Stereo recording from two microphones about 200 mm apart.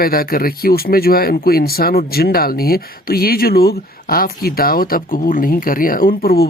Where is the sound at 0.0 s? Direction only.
45° left (ahead or behind).